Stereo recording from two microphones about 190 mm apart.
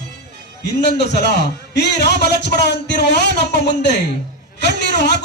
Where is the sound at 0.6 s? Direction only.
60° left (ahead or behind).